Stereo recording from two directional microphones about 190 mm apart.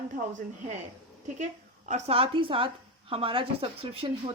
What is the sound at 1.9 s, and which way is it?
Speech, 30° right (ahead or behind).